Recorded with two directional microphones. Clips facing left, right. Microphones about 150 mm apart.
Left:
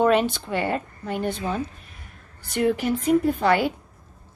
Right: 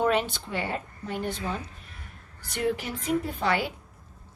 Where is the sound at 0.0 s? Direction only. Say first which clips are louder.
Left 6 dB; 60° left (ahead or behind).